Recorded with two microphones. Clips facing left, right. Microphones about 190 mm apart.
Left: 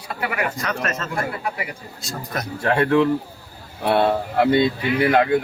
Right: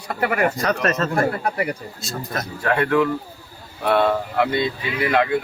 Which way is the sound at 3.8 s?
30° left (ahead or behind).